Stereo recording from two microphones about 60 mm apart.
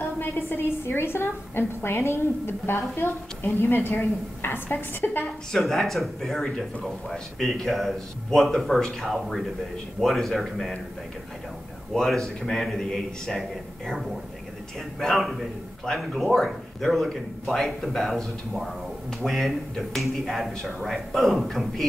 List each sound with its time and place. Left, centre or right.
0.0 s a woman's voice: left
5.5 s speech: centre
11.9 s a man's voice: centre
15.0 s speech: centre